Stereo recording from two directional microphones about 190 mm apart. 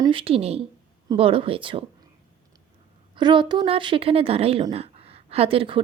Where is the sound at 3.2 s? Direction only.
25° right (ahead or behind).